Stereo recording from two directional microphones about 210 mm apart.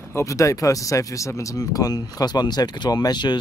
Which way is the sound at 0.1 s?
15° left (ahead or behind).